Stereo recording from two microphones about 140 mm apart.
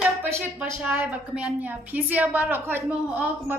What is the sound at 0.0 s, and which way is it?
A woman's voice, 15° right (ahead or behind).